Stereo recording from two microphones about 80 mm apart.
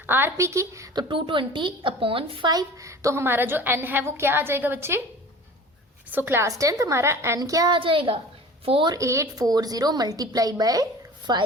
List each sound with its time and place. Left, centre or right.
0.0 s a woman's voice: right
0.9 s a woman's voice: right
2.5 s a woman's voice: right
6.1 s a woman's voice: right
6.5 s a woman's voice: right
7.3 s a woman's voice: right
7.7 s a woman's voice: right
9.0 s a woman's voice: right
9.5 s a woman's voice: right
11.3 s a woman's voice: right